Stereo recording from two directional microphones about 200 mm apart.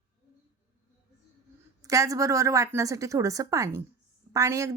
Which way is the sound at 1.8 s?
15° right (ahead or behind).